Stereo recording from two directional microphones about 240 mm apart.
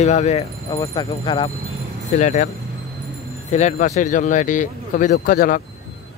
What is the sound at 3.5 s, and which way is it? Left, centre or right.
Speech, left.